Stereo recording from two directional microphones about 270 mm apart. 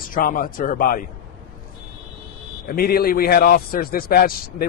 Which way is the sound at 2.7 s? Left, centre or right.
Left.